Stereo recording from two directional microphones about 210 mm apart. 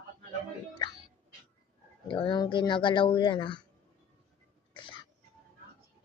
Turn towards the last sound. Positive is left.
turn(degrees=25)  # may be behind; listen again after turning